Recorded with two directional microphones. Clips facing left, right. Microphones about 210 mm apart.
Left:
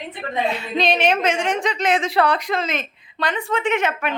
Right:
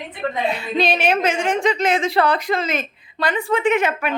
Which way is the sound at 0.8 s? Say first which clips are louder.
Even; 5° right (ahead or behind).